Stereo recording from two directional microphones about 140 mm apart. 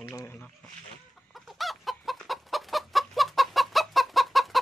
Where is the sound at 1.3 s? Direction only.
Centre (ahead or behind).